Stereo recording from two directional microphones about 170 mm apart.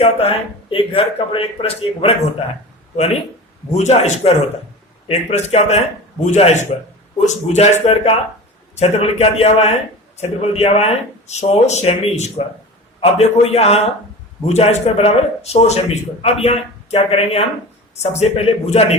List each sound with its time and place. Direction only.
0.0 s speech: 35° left (ahead or behind)